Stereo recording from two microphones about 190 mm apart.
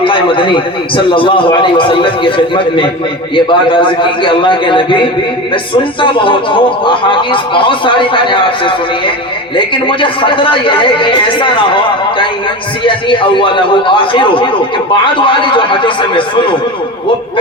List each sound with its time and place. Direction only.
0.0 s speech: 25° left (ahead or behind)
3.3 s speech: 25° left (ahead or behind)
12.8 s speech: 25° left (ahead or behind)